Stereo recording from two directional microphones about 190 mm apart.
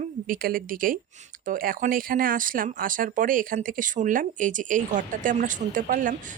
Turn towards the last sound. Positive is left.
turn(degrees=-45)  # may be behind; listen again after turning